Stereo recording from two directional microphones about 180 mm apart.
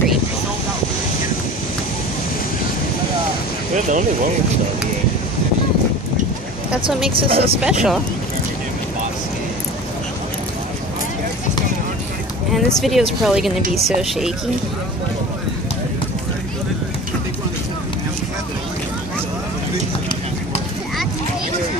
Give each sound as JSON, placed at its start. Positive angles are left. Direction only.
{"t": 7.2, "sound": "speech", "side_deg": -30}
{"t": 7.6, "sound": "speech", "side_deg": -5}
{"t": 12.5, "sound": "speech", "side_deg": 0}